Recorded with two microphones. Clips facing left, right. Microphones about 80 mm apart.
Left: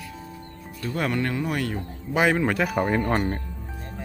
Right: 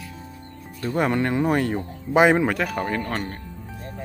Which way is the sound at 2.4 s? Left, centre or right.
Centre.